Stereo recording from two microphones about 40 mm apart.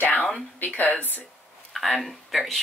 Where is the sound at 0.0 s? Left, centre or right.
Left.